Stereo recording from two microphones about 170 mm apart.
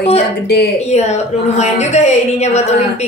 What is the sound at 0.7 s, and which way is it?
Speech, 40° left (ahead or behind).